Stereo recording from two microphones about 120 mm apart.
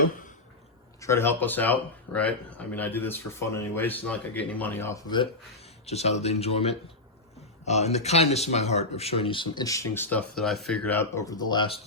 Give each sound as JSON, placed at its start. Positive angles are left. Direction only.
{"t": 1.0, "sound": "speech", "side_deg": 20}
{"t": 5.0, "sound": "speech", "side_deg": 40}
{"t": 5.8, "sound": "speech", "side_deg": 65}
{"t": 9.6, "sound": "speech", "side_deg": 25}
{"t": 11.1, "sound": "speech", "side_deg": 30}